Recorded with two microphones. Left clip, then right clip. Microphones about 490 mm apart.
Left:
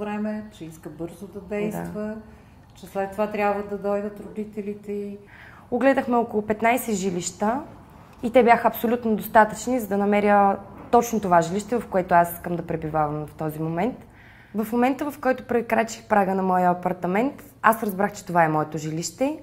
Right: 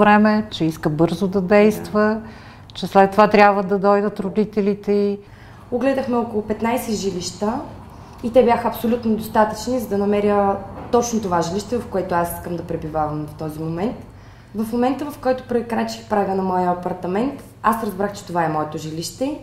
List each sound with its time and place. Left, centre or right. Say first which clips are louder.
0.0 s a woman's voice: right 16 dB; right
5.8 s a woman's voice: even; left